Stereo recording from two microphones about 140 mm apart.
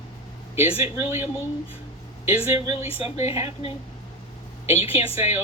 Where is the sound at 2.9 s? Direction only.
45° left (ahead or behind).